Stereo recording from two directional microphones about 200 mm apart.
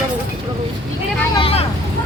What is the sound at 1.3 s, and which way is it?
Speech, 25° left (ahead or behind).